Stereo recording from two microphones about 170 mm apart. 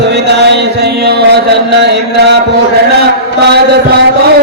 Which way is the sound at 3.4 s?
75° right (ahead or behind).